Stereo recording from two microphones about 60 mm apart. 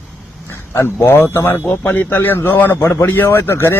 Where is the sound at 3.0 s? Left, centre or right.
Left.